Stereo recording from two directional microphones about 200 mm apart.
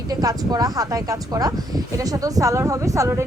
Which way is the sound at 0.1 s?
20° right (ahead or behind).